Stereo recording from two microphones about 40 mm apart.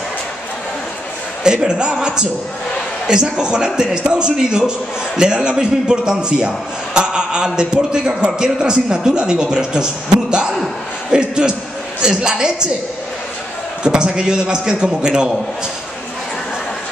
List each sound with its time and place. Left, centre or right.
1.4 s a man's voice: centre
13.8 s a man's voice: right